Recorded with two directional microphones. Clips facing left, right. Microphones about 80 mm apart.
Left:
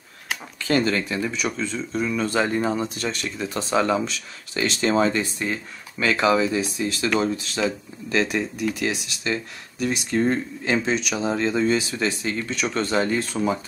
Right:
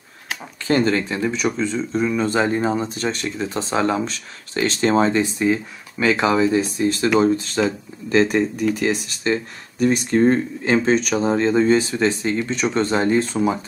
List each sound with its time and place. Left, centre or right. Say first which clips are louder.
0.7 s speech: right 3 dB; right
5.4 s speech: right 8 dB; centre
6.3 s speech: right 4 dB; right